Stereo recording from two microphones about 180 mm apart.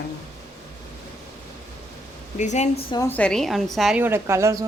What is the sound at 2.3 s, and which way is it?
Speech, 40° left (ahead or behind).